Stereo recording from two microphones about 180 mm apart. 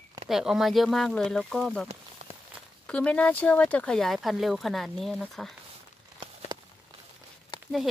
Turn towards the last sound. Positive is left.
turn(degrees=25)  # may be behind; listen again after turning